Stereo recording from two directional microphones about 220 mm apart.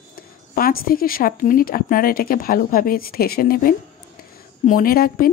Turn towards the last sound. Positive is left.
turn(degrees=40)  # may be behind; listen again after turning